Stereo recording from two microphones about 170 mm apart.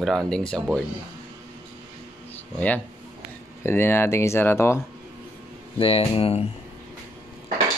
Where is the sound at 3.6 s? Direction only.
15° left (ahead or behind).